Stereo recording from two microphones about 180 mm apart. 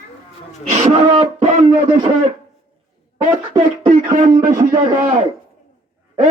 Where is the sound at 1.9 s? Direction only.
25° right (ahead or behind).